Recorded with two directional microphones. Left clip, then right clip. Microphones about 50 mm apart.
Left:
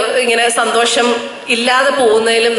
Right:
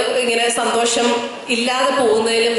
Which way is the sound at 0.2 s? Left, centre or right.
Left.